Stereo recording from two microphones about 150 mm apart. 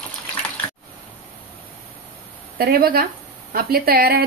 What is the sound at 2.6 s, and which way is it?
A woman's voice, 85° right.